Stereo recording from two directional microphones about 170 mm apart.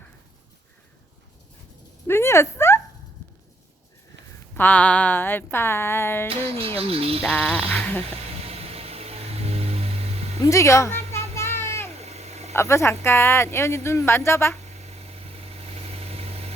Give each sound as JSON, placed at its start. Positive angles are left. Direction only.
{"t": 2.0, "sound": "a sound", "side_deg": 15}
{"t": 4.5, "sound": "speech", "side_deg": 10}
{"t": 6.2, "sound": "speech", "side_deg": -35}
{"t": 7.2, "sound": "speech", "side_deg": 5}
{"t": 8.4, "sound": "vehicle", "side_deg": -35}
{"t": 10.4, "sound": "a woman's voice", "side_deg": 20}
{"t": 11.3, "sound": "a sound", "side_deg": 15}
{"t": 11.9, "sound": "vehicle", "side_deg": -40}
{"t": 12.5, "sound": "speech", "side_deg": 15}
{"t": 14.8, "sound": "vehicle", "side_deg": -35}